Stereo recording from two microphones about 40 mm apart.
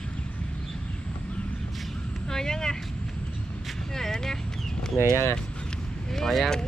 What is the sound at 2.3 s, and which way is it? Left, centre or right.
Speech, centre.